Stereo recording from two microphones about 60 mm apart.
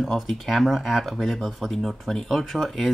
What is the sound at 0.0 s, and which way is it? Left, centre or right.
Speech, centre.